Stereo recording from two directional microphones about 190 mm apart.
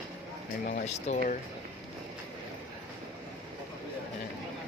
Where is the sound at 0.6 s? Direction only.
40° left (ahead or behind).